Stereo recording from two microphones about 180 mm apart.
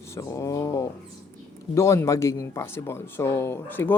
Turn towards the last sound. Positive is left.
turn(degrees=10)  # may be behind; listen again after turning